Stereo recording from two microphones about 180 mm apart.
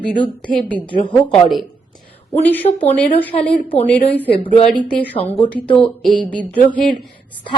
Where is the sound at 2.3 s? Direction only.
10° left (ahead or behind).